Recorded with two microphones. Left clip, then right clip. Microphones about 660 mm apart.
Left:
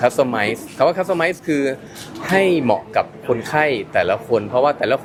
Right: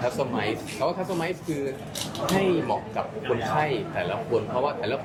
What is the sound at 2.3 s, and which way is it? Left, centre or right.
Speech, left.